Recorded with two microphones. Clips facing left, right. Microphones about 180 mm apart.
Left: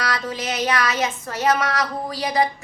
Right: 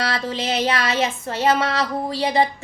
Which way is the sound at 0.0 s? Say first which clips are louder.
Right 2 dB; 25° right (ahead or behind).